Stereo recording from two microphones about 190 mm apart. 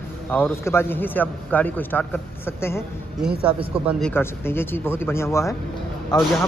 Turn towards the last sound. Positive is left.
turn(degrees=20)  # may be behind; listen again after turning